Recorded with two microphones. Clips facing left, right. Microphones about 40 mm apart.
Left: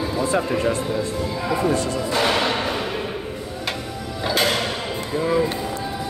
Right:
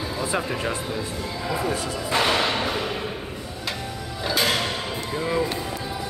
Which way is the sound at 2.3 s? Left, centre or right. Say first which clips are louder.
Left 2 dB; centre.